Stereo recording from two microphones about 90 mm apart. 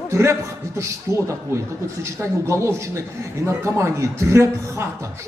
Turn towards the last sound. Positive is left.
turn(degrees=-30)  # may be behind; listen again after turning